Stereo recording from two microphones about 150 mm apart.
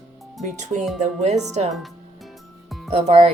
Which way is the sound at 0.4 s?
50° right (ahead or behind).